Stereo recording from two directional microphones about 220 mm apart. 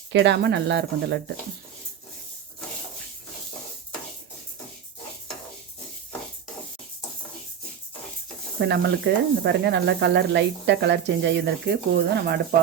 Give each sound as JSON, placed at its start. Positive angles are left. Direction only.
{"t": 0.1, "sound": "speech", "side_deg": -55}
{"t": 8.6, "sound": "speech", "side_deg": -50}